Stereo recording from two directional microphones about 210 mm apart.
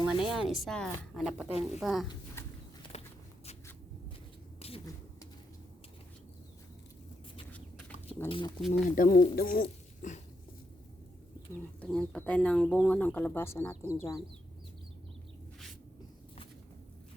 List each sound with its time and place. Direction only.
0.1 s a woman's voice: centre (ahead or behind)
2.9 s a sound: 30° left (ahead or behind)
4.6 s a sound: 30° left (ahead or behind)
7.5 s chicken: 5° left (ahead or behind)
8.3 s speech: 25° left (ahead or behind)
9.0 s speech: 45° left (ahead or behind)
11.8 s speech: 5° left (ahead or behind)